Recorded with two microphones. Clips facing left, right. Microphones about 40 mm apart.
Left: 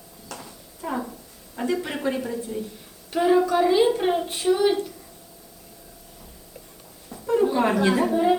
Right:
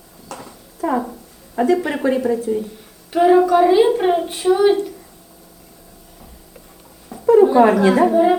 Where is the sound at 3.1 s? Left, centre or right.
Centre.